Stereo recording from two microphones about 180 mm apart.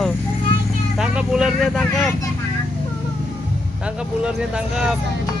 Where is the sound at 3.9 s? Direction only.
5° right (ahead or behind).